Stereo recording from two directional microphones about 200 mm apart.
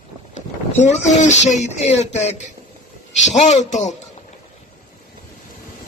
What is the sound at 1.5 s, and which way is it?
Speech, 35° left (ahead or behind).